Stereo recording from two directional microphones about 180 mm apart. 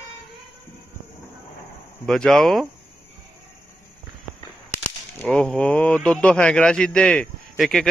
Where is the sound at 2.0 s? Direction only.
5° left (ahead or behind).